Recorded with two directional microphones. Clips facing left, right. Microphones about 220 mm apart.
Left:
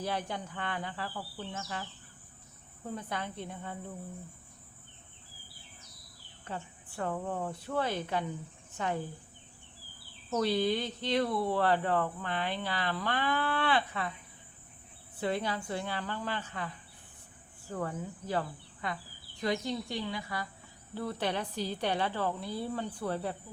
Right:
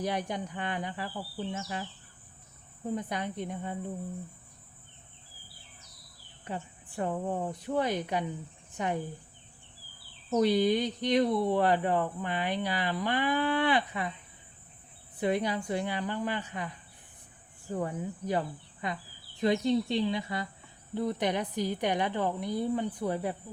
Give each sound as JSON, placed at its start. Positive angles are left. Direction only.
{"t": 0.0, "sound": "speech", "side_deg": -15}
{"t": 2.9, "sound": "speech", "side_deg": -15}
{"t": 6.4, "sound": "speech", "side_deg": -15}
{"t": 10.2, "sound": "speech", "side_deg": -15}
{"t": 15.2, "sound": "speech", "side_deg": -15}